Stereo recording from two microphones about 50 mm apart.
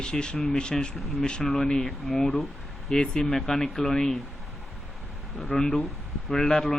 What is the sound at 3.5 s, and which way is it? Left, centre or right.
Speech, centre.